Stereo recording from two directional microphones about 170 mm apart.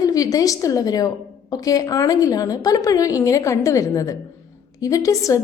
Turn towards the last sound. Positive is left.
turn(degrees=20)  # may be behind; listen again after turning